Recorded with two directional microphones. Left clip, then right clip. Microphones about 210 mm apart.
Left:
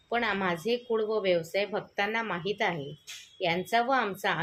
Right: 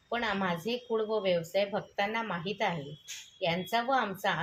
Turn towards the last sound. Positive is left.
turn(degrees=40)  # may be behind; listen again after turning